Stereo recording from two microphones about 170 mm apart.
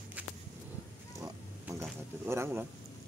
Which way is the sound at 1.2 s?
15° right (ahead or behind).